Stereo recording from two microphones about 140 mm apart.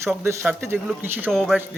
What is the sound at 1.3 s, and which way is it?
Speech, 5° left (ahead or behind).